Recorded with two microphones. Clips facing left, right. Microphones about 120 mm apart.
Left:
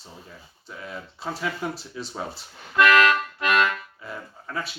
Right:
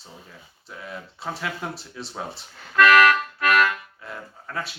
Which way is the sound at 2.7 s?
25° left (ahead or behind).